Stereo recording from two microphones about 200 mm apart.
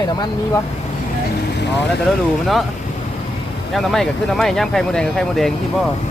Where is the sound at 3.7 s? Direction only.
Centre (ahead or behind).